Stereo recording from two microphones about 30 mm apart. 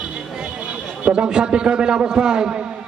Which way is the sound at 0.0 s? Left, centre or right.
Right.